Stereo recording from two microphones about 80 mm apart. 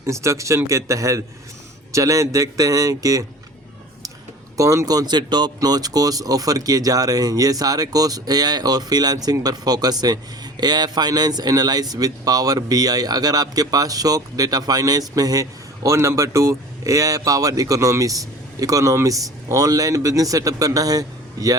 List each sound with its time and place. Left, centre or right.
0.0 s speech: right
4.5 s speech: right
5.5 s speech: right